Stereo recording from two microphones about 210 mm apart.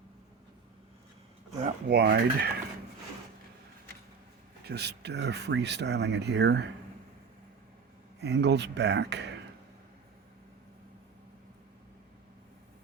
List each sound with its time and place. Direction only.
1.5 s a sound: 35° right (ahead or behind)
1.9 s speech: 50° right (ahead or behind)
4.6 s speech: 50° right (ahead or behind)
8.2 s speech: 50° right (ahead or behind)